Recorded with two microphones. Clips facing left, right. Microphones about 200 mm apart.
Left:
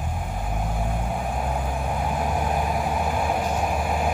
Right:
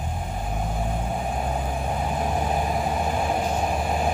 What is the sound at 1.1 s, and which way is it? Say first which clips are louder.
Vehicle: even; 35° right (ahead or behind).